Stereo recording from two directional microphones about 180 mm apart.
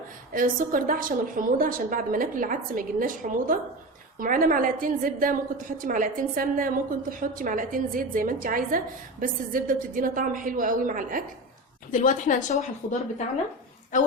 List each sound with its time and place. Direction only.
0.3 s a woman's voice: 50° right (ahead or behind)
11.9 s a woman's voice: 45° left (ahead or behind)